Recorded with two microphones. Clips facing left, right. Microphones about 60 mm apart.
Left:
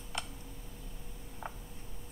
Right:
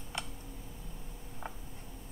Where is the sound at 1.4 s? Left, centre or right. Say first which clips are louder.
Left 1 dB; centre.